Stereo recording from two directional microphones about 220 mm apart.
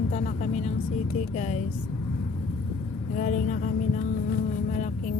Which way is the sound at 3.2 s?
35° left (ahead or behind).